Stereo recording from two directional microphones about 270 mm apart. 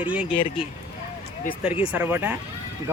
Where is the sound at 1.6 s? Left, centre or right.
Centre.